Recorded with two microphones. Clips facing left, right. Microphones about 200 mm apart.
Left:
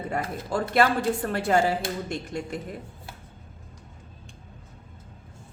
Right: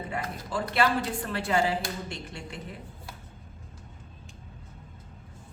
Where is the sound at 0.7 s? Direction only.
45° left (ahead or behind).